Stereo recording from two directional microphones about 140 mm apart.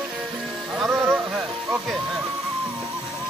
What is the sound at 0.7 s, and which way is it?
Music, 5° right (ahead or behind).